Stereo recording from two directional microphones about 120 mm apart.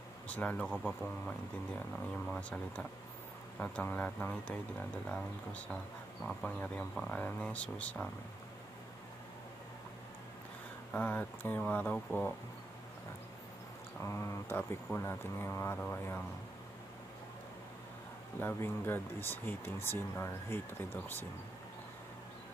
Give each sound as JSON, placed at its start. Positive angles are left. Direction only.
{"t": 0.3, "sound": "speech", "side_deg": 10}
{"t": 2.2, "sound": "speech", "side_deg": 10}
{"t": 10.9, "sound": "speech", "side_deg": 15}
{"t": 14.0, "sound": "speech", "side_deg": 25}
{"t": 18.4, "sound": "speech", "side_deg": 20}